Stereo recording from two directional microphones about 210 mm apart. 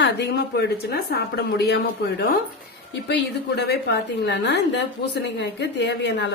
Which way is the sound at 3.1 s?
55° left (ahead or behind).